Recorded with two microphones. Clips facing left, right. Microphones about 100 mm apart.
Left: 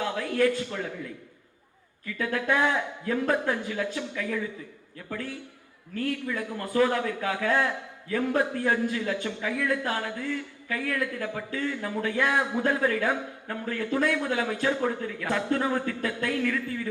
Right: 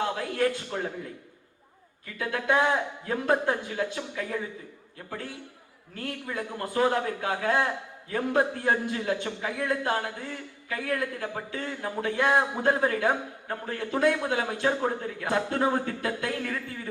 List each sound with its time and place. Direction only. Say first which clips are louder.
0.3 s speech: left 4 dB; 35° right (ahead or behind)